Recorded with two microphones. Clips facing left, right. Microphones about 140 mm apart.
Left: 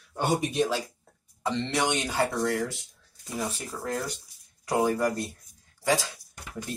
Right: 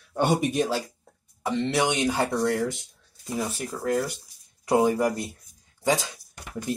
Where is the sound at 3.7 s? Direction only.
5° right (ahead or behind).